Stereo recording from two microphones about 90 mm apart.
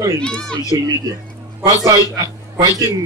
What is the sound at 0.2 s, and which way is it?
Speech, 10° left (ahead or behind).